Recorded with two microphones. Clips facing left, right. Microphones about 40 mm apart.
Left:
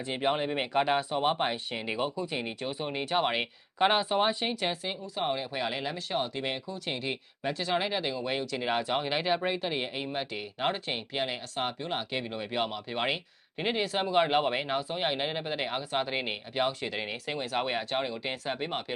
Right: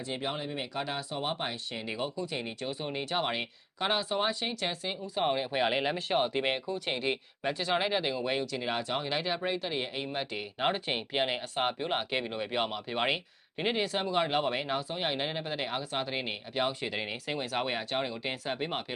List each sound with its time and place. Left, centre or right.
0.1 s speech: left
0.3 s speech: left
1.1 s speech: left
3.8 s speech: centre
4.6 s speech: centre; by 6.6 s right
6.7 s speech: centre
14.0 s speech: centre
16.6 s speech: centre